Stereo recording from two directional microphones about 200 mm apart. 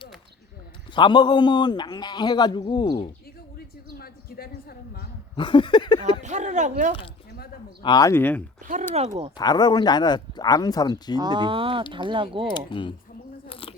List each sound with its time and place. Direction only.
0.9 s a man's voice: 20° left (ahead or behind)
3.9 s a sound: 50° left (ahead or behind)
5.4 s a man's voice: 25° left (ahead or behind)
6.2 s speech: 35° right (ahead or behind)
7.8 s speech: 20° left (ahead or behind)
8.6 s speech: 40° right (ahead or behind)
9.0 s speech: 30° right (ahead or behind)
9.4 s a man's voice: 20° left (ahead or behind)
11.2 s speech: 25° right (ahead or behind)
12.5 s a man's voice: 25° left (ahead or behind)
13.5 s biting: 25° left (ahead or behind)